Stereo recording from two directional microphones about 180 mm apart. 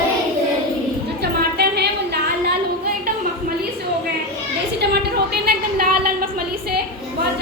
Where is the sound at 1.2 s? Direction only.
65° right (ahead or behind).